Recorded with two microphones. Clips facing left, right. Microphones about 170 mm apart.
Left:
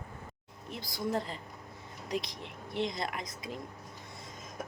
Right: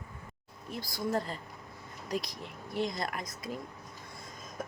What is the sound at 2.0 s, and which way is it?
Speech, 45° right (ahead or behind).